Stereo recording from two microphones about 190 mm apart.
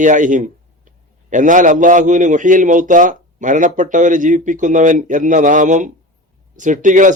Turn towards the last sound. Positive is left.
turn(degrees=-45)  # may be behind; listen again after turning